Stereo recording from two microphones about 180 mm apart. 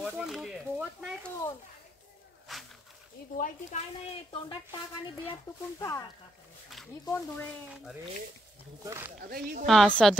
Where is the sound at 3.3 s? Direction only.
45° left (ahead or behind).